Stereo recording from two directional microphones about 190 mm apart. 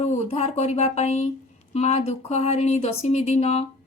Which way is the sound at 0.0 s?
35° left (ahead or behind).